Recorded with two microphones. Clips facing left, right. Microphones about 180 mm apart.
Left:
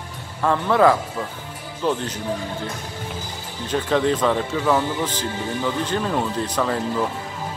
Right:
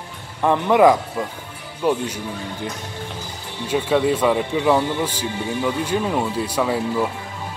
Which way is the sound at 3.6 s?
10° right (ahead or behind).